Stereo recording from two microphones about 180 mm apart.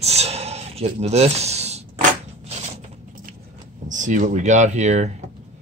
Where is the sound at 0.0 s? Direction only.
35° right (ahead or behind).